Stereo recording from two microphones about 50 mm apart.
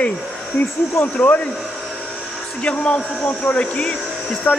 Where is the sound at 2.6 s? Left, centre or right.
Left.